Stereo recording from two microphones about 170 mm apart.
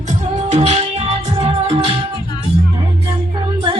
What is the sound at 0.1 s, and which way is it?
Music, 40° right (ahead or behind).